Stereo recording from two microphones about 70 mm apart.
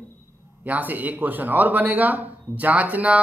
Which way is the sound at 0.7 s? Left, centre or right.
Right.